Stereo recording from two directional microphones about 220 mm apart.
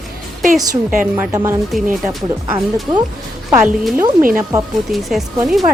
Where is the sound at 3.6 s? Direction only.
5° right (ahead or behind).